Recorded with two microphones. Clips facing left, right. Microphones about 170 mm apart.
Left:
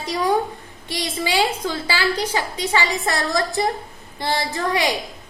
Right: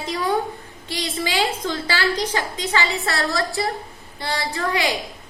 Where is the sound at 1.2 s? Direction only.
10° left (ahead or behind).